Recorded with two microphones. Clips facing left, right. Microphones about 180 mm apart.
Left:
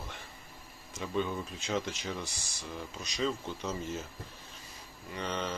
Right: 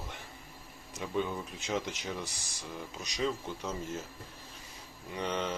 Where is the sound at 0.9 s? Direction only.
15° right (ahead or behind).